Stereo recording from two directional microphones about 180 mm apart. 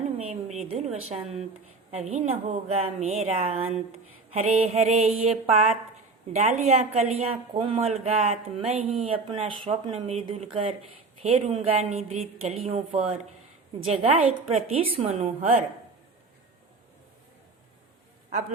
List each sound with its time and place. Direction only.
0.2 s a woman's voice: 40° right (ahead or behind)